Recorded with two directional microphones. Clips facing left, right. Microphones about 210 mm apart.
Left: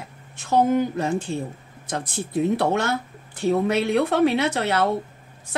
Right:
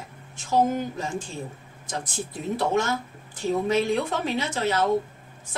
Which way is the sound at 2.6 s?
65° left (ahead or behind).